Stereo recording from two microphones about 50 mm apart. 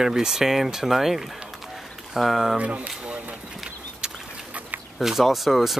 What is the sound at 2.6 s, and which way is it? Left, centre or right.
Speech, right.